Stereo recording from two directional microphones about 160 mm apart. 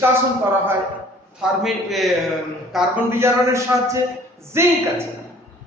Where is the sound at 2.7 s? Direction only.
10° right (ahead or behind).